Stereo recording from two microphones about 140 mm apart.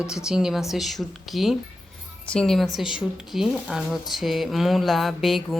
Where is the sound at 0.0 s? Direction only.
5° right (ahead or behind).